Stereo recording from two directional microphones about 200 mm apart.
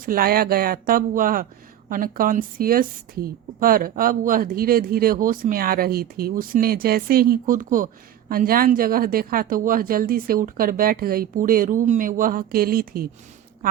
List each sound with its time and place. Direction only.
0.0 s a woman's voice: 45° right (ahead or behind)